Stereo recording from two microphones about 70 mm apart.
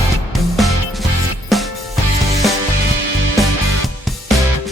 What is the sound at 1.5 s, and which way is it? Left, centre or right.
Music, centre.